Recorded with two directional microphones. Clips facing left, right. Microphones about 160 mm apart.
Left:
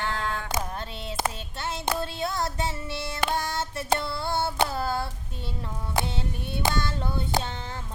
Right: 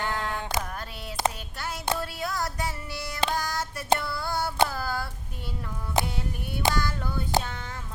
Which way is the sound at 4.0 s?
25° left (ahead or behind).